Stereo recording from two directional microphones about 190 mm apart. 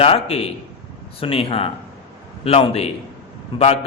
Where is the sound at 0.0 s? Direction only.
30° left (ahead or behind).